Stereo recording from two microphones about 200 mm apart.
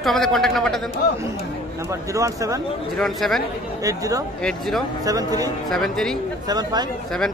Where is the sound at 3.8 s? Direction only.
15° right (ahead or behind).